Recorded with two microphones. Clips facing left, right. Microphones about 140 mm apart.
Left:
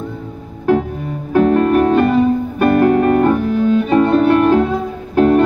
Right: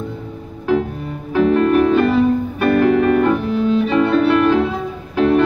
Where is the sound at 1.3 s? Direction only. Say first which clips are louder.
Left 2 dB; 45° left (ahead or behind).